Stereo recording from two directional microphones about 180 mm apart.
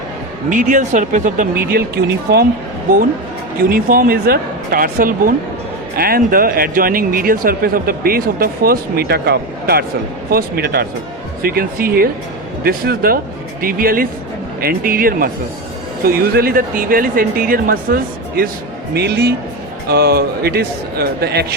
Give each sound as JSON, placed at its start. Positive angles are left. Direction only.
{"t": 0.5, "sound": "speech", "side_deg": -45}
{"t": 3.6, "sound": "speech", "side_deg": -55}